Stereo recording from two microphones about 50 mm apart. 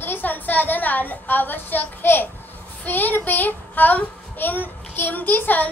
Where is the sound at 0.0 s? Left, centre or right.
Left.